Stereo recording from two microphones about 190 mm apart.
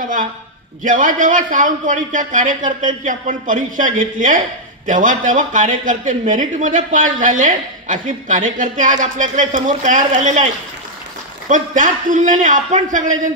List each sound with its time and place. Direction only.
0.8 s speech: 45° right (ahead or behind)
11.4 s speech: 40° right (ahead or behind)